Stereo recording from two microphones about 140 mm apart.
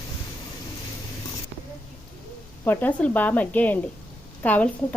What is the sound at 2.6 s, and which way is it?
A woman's voice, 15° left (ahead or behind).